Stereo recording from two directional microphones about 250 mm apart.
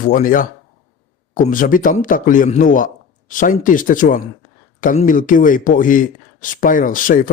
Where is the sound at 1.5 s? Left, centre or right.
Left.